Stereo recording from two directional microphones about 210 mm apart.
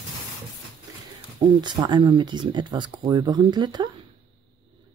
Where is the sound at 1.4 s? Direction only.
20° right (ahead or behind).